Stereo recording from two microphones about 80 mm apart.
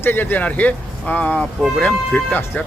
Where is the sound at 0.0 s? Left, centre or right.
Left.